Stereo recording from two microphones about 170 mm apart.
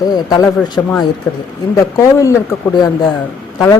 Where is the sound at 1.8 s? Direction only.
20° left (ahead or behind).